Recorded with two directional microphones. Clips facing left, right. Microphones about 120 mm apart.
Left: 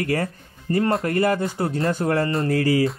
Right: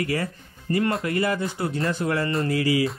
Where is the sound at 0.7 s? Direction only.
30° left (ahead or behind).